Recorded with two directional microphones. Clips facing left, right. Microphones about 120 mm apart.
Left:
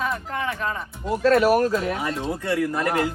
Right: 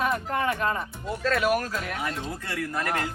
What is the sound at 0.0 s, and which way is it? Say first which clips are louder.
Speech: right 1 dB; centre (ahead or behind).